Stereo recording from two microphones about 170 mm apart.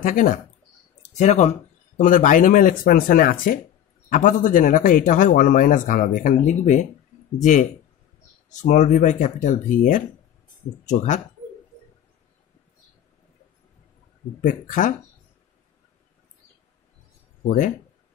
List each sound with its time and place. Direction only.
0.0 s a man's voice: 50° left (ahead or behind)
8.5 s a man's voice: 45° left (ahead or behind)
14.4 s a man's voice: 50° left (ahead or behind)
17.5 s a man's voice: 50° left (ahead or behind)